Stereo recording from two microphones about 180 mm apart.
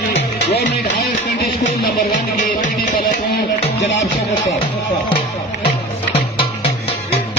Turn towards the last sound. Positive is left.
turn(degrees=30)  # may be behind; listen again after turning